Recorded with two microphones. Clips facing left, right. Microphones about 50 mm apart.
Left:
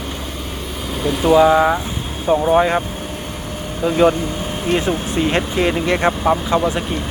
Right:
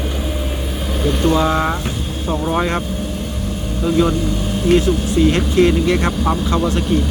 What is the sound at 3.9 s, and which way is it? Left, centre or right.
Speech, left.